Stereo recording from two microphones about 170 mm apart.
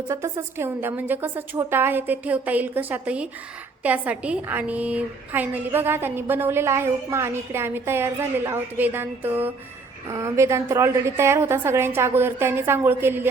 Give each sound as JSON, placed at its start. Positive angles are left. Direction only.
{"t": 0.1, "sound": "a woman's voice", "side_deg": -15}